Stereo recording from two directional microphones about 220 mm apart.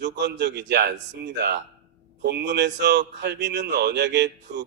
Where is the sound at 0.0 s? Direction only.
50° right (ahead or behind).